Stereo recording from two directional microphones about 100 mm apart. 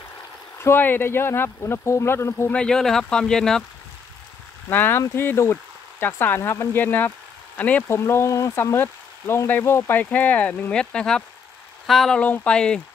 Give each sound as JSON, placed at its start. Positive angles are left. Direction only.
{"t": 0.6, "sound": "speech", "side_deg": 25}
{"t": 2.5, "sound": "speech", "side_deg": 10}
{"t": 4.6, "sound": "speech", "side_deg": 20}
{"t": 7.9, "sound": "speech", "side_deg": 25}